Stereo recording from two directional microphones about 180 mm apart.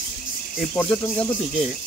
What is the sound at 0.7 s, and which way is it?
Speech, 10° left (ahead or behind).